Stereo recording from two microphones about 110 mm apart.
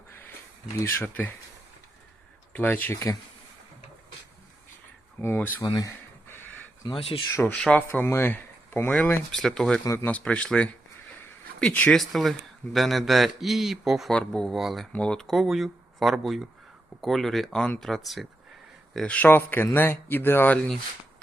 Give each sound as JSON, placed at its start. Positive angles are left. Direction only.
{"t": 0.9, "sound": "a man's voice", "side_deg": 20}
{"t": 2.5, "sound": "speech", "side_deg": 15}
{"t": 5.2, "sound": "a man's voice", "side_deg": 20}
{"t": 5.6, "sound": "speech", "side_deg": 40}
{"t": 6.2, "sound": "a sound", "side_deg": 20}
{"t": 7.3, "sound": "speech", "side_deg": 15}
{"t": 9.3, "sound": "a man's voice", "side_deg": 5}
{"t": 11.9, "sound": "a man's voice", "side_deg": 0}
{"t": 14.1, "sound": "a man's voice", "side_deg": 10}
{"t": 18.9, "sound": "a man's voice", "side_deg": 15}